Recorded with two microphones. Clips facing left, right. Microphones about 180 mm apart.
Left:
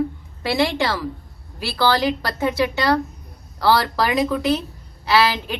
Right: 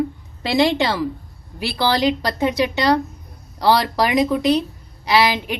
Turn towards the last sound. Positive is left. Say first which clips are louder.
# right 1 dB
turn(degrees=-15)  # may be behind; listen again after turning